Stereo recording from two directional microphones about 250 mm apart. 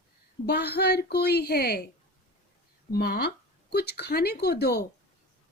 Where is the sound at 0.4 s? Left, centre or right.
Left.